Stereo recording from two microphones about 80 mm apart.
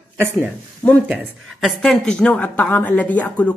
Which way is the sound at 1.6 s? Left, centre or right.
Centre.